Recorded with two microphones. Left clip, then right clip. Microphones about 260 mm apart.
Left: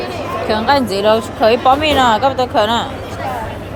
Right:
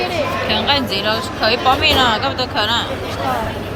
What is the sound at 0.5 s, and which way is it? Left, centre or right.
A woman's voice, left.